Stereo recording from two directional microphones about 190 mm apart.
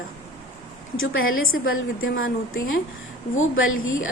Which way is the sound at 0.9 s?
90° left.